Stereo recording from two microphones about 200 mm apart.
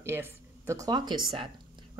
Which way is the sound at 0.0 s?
10° right (ahead or behind).